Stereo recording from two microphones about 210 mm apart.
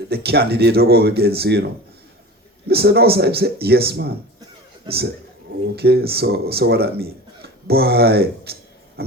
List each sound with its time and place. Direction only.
0.1 s speech: 50° right (ahead or behind)
2.6 s speech: 50° right (ahead or behind)
5.7 s speech: 50° right (ahead or behind)
9.0 s a sound: 50° right (ahead or behind)